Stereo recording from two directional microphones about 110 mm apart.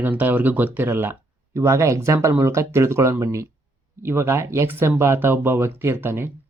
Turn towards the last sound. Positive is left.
turn(degrees=-20)  # may be behind; listen again after turning